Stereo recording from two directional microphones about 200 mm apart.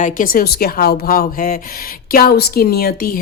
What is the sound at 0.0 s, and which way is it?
A woman's voice, 45° left (ahead or behind).